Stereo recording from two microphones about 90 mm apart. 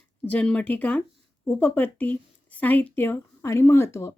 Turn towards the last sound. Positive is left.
turn(degrees=30)  # may be behind; listen again after turning